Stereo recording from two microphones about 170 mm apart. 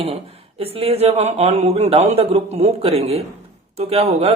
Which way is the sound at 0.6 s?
35° right (ahead or behind).